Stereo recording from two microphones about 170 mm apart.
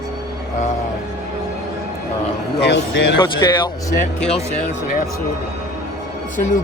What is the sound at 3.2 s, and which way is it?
Speech, 25° left (ahead or behind).